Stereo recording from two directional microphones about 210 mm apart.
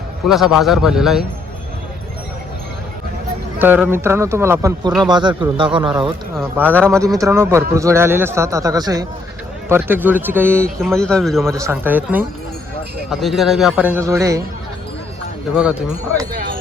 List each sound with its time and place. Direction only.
0.3 s a man's voice: centre (ahead or behind)
3.6 s speech: 10° right (ahead or behind)
6.4 s speech: 10° right (ahead or behind)
10.8 s a man's voice: 5° left (ahead or behind)
11.5 s a man's voice: 15° right (ahead or behind)